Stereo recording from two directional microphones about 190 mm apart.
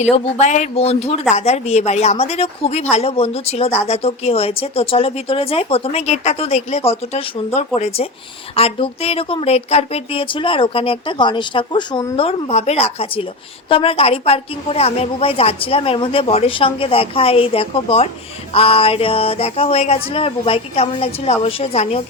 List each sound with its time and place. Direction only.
0.0 s speech: 40° left (ahead or behind)